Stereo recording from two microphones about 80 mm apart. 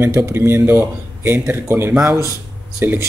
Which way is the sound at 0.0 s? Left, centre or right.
Right.